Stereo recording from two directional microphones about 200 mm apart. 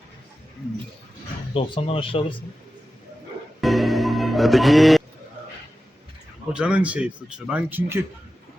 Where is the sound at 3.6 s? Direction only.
Centre (ahead or behind).